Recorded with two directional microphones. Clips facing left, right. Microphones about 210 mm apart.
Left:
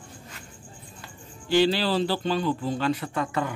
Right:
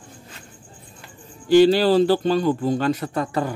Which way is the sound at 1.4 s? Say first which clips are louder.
Right 8 dB; 45° right (ahead or behind).